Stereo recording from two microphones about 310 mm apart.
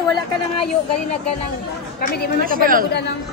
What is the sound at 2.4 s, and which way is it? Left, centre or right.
Speech, right.